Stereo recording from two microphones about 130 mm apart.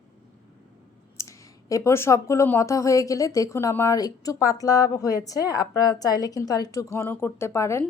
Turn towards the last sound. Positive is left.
turn(degrees=20)  # may be behind; listen again after turning